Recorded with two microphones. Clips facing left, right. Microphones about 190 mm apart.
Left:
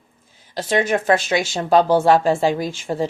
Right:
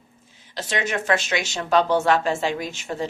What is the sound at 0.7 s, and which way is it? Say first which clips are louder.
Speech: left 6 dB; 35° left (ahead or behind).